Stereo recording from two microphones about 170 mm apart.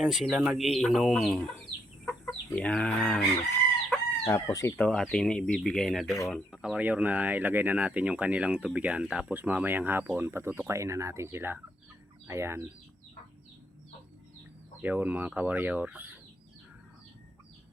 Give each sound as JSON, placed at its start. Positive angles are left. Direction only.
{"t": 0.0, "sound": "speech", "side_deg": 0}
{"t": 2.0, "sound": "chicken", "side_deg": 10}
{"t": 4.2, "sound": "speech", "side_deg": 15}
{"t": 4.8, "sound": "speech", "side_deg": 5}
{"t": 14.8, "sound": "speech", "side_deg": -10}